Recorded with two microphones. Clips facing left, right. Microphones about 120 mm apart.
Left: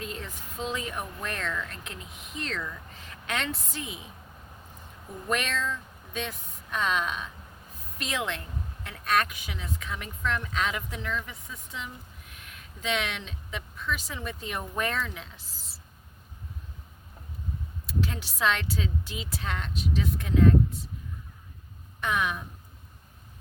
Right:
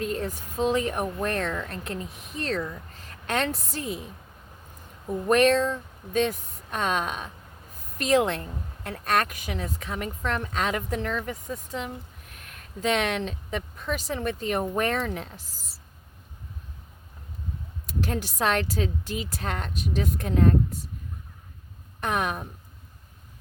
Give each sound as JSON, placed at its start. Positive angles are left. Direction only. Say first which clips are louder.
{"t": 0.0, "sound": "a woman's voice", "louder": "right 9 dB", "side_deg": -45}
{"t": 5.3, "sound": "speech", "louder": "right 10 dB", "side_deg": -40}
{"t": 17.8, "sound": "speech", "louder": "right 3 dB", "side_deg": -45}
{"t": 22.0, "sound": "speech", "louder": "right 2 dB", "side_deg": -45}